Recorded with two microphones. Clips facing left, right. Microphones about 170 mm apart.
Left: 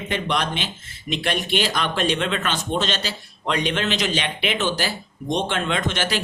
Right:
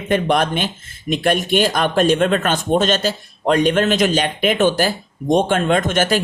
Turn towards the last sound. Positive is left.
turn(degrees=-50)  # may be behind; listen again after turning